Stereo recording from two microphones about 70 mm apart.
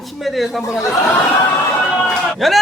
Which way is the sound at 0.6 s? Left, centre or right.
Left.